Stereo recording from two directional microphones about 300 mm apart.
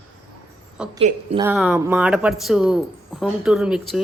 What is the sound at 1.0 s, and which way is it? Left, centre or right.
Speech, right.